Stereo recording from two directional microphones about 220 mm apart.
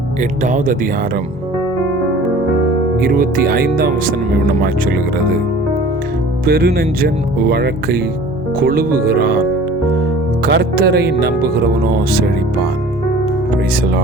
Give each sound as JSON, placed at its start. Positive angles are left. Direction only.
{"t": 0.2, "sound": "speech", "side_deg": -35}
{"t": 3.0, "sound": "speech", "side_deg": -40}
{"t": 6.4, "sound": "speech", "side_deg": -45}
{"t": 10.4, "sound": "speech", "side_deg": -45}